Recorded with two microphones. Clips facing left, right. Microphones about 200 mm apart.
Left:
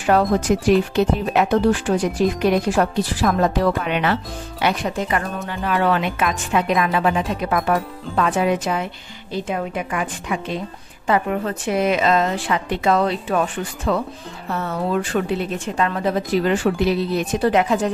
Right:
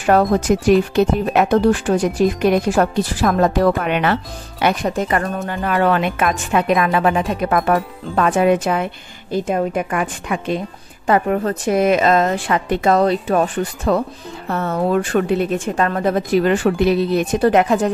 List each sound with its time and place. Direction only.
0.0 s speech: 50° right (ahead or behind)